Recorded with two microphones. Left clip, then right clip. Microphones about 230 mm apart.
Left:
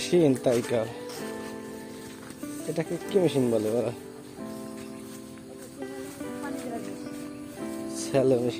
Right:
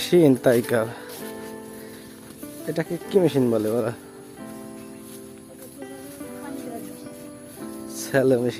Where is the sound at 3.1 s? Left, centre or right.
Right.